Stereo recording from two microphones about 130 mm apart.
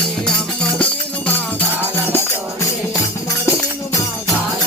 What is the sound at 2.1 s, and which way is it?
Music, 25° left (ahead or behind).